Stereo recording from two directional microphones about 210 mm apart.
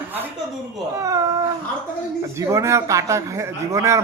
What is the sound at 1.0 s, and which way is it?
Speech, 15° right (ahead or behind).